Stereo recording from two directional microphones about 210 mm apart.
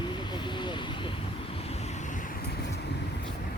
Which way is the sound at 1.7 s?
35° left (ahead or behind).